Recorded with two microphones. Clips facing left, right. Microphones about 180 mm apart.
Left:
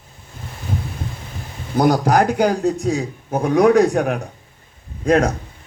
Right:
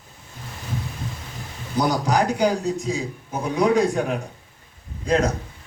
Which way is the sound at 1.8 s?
55° left (ahead or behind).